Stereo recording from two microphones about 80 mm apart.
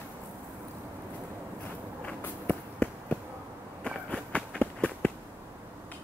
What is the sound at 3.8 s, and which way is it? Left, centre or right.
Run, centre.